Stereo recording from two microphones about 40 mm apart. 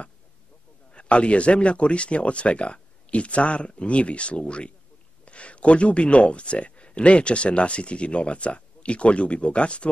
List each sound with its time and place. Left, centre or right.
0.9 s speech: left